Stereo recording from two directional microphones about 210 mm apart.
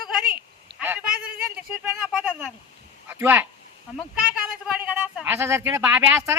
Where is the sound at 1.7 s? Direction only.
5° right (ahead or behind).